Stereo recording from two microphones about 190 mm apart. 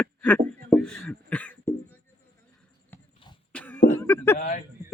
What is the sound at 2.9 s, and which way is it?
Basketball bounce, 10° left (ahead or behind).